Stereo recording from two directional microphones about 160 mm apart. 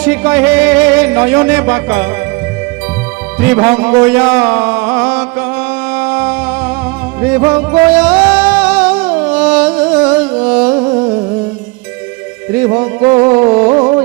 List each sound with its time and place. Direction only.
0.0 s music: 10° right (ahead or behind)
3.4 s a sound: 10° right (ahead or behind)
7.2 s music: 10° right (ahead or behind)
10.8 s a sound: 30° right (ahead or behind)
12.5 s music: 15° right (ahead or behind)
13.5 s music: 35° right (ahead or behind)